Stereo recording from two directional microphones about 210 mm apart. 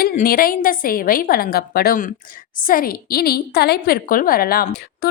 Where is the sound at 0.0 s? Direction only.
45° left (ahead or behind).